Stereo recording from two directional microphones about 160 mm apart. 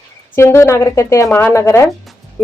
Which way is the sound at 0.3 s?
15° left (ahead or behind).